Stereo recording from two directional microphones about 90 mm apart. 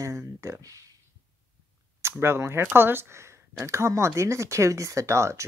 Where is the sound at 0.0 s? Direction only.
35° right (ahead or behind).